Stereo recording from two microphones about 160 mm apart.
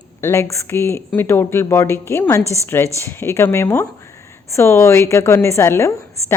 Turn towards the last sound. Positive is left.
turn(degrees=15)  # may be behind; listen again after turning